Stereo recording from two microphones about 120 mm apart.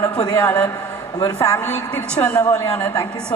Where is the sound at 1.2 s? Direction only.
30° left (ahead or behind).